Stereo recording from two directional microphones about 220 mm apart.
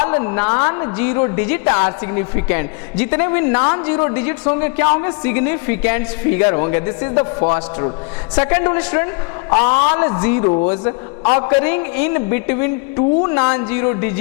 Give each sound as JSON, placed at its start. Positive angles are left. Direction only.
{"t": 0.0, "sound": "a man's voice", "side_deg": 20}